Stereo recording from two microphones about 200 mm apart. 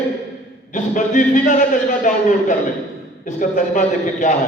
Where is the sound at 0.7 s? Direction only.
40° left (ahead or behind).